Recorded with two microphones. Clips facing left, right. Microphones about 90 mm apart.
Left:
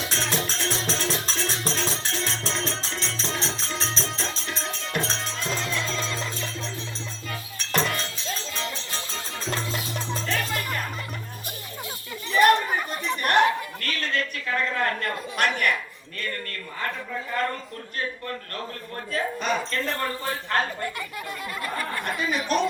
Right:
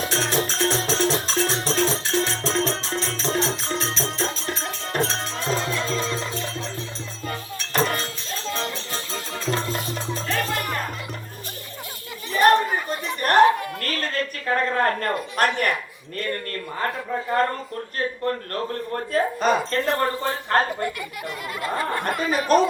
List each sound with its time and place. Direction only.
0.0 s music: 45° right (ahead or behind)
7.3 s music: 40° right (ahead or behind)
12.3 s a sound: 35° right (ahead or behind)
18.3 s speech: 40° right (ahead or behind)
22.1 s speech: 45° right (ahead or behind)